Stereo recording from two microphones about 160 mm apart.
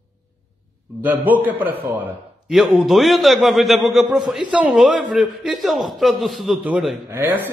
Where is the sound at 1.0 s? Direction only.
10° right (ahead or behind).